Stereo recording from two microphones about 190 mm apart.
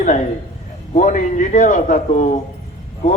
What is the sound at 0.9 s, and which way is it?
A man's voice, 40° left (ahead or behind).